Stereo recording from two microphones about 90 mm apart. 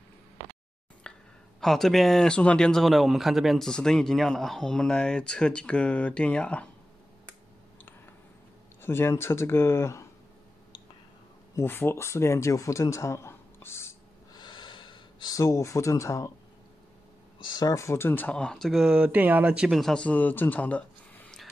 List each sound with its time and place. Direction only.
1.0 s a sound: 10° left (ahead or behind)
1.6 s speech: 5° left (ahead or behind)
8.8 s speech: 25° left (ahead or behind)
11.5 s speech: 25° left (ahead or behind)
14.3 s gasp: 60° left (ahead or behind)
15.3 s speech: 35° left (ahead or behind)
17.4 s speech: 50° left (ahead or behind)
17.7 s speech: 30° left (ahead or behind)
18.3 s speech: 10° left (ahead or behind)
18.9 s speech: 15° right (ahead or behind)
19.8 s speech: 10° left (ahead or behind)